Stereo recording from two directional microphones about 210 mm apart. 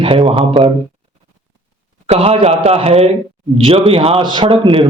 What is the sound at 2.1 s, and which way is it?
A man's voice, 30° right (ahead or behind).